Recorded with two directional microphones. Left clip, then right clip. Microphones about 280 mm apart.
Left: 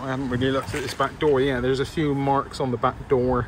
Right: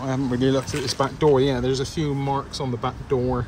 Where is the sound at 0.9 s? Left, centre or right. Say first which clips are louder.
Right 2 dB; centre.